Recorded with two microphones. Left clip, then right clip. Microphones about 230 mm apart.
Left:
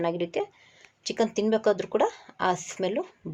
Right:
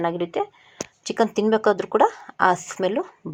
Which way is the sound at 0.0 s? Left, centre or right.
Centre.